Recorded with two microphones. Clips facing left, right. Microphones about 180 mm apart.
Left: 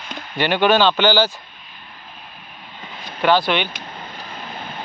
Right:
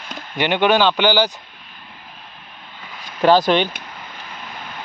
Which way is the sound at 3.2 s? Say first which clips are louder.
Right 3 dB; 40° right (ahead or behind).